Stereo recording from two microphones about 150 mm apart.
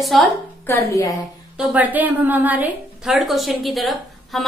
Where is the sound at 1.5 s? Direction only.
10° right (ahead or behind).